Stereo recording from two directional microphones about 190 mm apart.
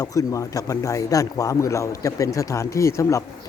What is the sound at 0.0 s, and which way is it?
Speech, 20° left (ahead or behind).